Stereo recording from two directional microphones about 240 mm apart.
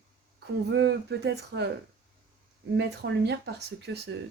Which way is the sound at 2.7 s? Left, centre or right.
Right.